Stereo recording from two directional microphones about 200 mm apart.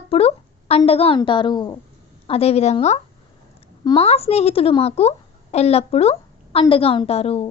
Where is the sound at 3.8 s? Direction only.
20° left (ahead or behind).